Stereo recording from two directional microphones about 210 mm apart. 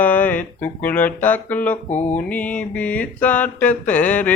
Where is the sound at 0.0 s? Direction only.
10° left (ahead or behind).